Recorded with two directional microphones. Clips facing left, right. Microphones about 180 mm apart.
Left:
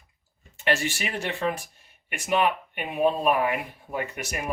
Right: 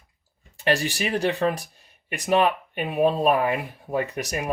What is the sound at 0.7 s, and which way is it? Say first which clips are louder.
Speech: right 3 dB; 35° right (ahead or behind).